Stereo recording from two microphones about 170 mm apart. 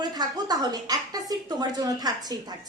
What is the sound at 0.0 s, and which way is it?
A woman's voice, 25° right (ahead or behind).